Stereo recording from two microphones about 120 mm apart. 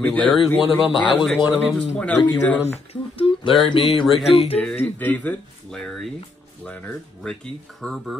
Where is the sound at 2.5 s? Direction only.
20° left (ahead or behind).